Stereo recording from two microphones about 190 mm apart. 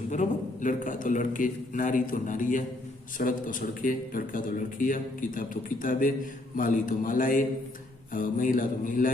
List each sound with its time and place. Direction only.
0.1 s a man's voice: 40° left (ahead or behind)